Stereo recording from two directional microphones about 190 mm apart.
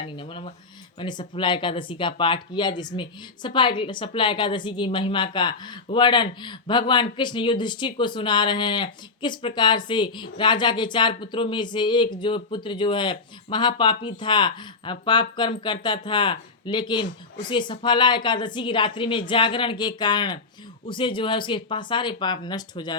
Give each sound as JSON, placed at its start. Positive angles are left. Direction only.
{"t": 0.0, "sound": "speech", "side_deg": 25}